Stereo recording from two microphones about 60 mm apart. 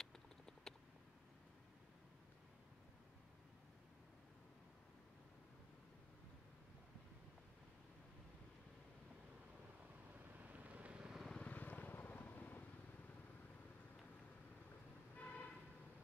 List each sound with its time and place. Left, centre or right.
0.0 s typing: centre
10.3 s vehicle: right
11.3 s vehicle: left
15.1 s a sound: left